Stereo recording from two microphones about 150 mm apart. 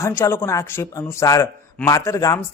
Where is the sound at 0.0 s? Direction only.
15° left (ahead or behind).